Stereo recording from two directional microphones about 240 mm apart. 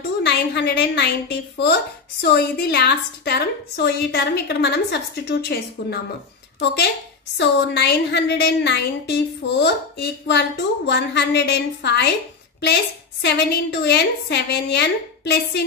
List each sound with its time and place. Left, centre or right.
0.2 s a woman's voice: left
13.2 s a woman's voice: left